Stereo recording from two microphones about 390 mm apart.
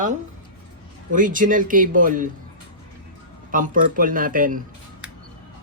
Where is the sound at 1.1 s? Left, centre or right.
Centre.